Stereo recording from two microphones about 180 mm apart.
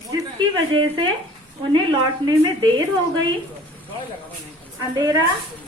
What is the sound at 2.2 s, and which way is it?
Speech, 25° right (ahead or behind).